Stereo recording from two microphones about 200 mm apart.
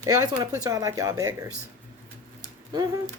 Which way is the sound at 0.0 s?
15° right (ahead or behind).